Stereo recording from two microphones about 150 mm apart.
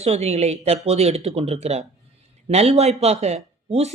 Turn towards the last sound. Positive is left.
turn(degrees=-45)  # may be behind; listen again after turning